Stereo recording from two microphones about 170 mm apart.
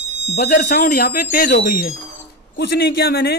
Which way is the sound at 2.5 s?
90° left.